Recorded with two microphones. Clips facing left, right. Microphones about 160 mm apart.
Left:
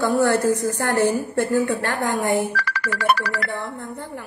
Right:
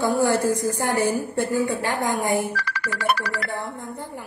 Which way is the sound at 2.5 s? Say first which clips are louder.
Left 3 dB; 60° left (ahead or behind).